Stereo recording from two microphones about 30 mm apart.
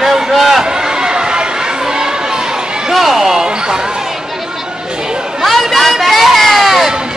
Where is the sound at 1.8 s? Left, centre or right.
Right.